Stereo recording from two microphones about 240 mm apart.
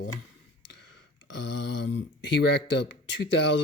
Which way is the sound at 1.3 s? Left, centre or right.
Left.